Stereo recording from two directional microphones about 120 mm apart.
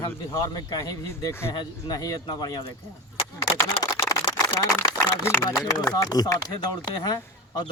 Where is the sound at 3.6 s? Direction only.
30° left (ahead or behind).